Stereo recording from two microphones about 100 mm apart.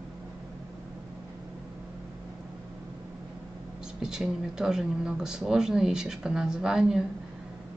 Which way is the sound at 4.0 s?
5° right (ahead or behind).